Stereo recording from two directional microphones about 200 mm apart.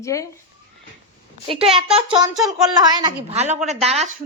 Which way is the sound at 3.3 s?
30° right (ahead or behind).